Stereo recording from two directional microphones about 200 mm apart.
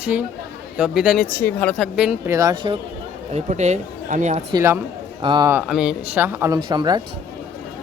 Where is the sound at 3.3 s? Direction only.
35° right (ahead or behind).